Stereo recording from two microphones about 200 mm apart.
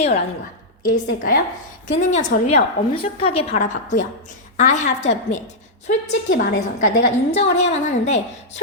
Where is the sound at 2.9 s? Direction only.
30° left (ahead or behind).